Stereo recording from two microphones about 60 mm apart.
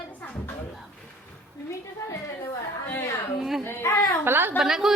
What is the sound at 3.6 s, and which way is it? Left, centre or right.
Speech, left.